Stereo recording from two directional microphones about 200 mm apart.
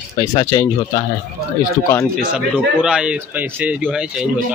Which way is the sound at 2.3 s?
5° right (ahead or behind).